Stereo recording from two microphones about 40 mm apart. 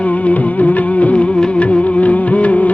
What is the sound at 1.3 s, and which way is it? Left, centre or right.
Music, left.